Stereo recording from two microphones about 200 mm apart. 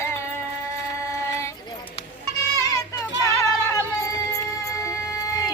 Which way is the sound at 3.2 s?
15° left (ahead or behind).